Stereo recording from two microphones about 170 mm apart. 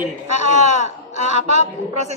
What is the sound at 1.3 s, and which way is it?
Speech, 40° right (ahead or behind).